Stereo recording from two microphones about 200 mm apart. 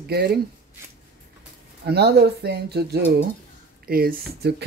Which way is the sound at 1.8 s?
55° right (ahead or behind).